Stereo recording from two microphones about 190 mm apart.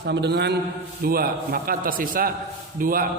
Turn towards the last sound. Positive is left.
turn(degrees=-50)  # may be behind; listen again after turning